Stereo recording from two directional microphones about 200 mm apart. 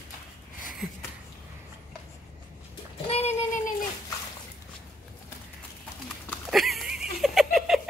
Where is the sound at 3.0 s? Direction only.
30° left (ahead or behind).